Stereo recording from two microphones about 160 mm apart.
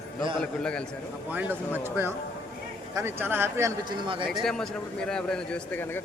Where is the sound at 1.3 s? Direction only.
10° right (ahead or behind).